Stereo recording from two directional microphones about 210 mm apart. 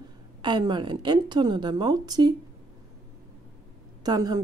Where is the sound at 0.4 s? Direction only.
20° right (ahead or behind).